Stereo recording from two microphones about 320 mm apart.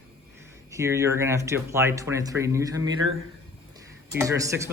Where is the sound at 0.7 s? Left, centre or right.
Centre.